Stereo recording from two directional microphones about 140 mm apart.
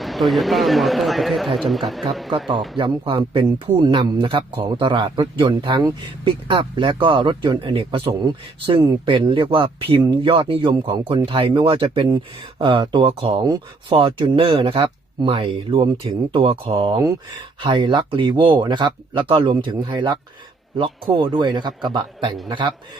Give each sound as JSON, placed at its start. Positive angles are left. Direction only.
{"t": 0.0, "sound": "speech", "side_deg": 0}
{"t": 2.7, "sound": "speech", "side_deg": -40}